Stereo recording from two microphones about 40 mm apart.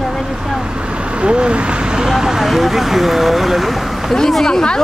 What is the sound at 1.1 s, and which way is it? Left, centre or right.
Speech, right.